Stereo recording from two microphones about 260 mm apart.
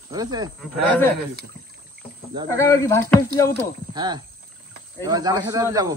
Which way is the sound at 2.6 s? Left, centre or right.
Centre.